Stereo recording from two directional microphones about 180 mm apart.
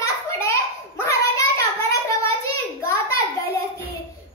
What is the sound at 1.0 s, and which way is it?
Child singing, 15° left (ahead or behind).